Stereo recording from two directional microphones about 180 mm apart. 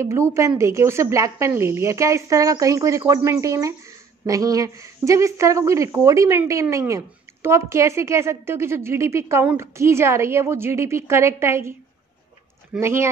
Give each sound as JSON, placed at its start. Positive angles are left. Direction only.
{"t": 0.0, "sound": "a woman's voice", "side_deg": -15}
{"t": 12.8, "sound": "a woman's voice", "side_deg": -15}